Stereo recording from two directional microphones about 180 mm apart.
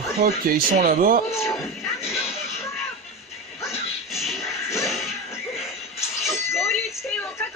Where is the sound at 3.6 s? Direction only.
Centre (ahead or behind).